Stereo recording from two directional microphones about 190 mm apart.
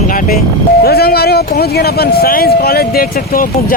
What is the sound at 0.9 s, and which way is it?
Speech, 55° left (ahead or behind).